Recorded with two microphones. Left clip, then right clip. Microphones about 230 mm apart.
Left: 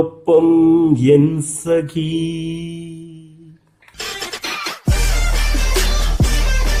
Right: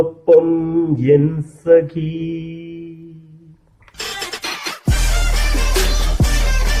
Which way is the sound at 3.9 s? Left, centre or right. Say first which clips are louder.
Even; centre.